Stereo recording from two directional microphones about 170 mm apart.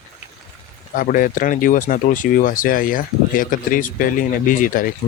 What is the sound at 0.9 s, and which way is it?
Speech, 55° left (ahead or behind).